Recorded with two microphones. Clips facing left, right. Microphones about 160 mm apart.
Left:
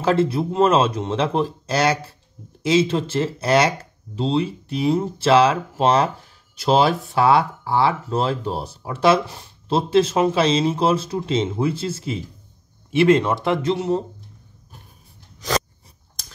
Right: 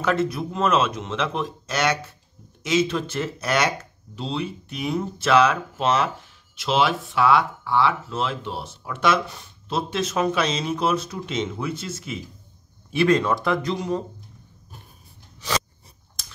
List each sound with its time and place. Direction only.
0.0 s speech: 30° left (ahead or behind)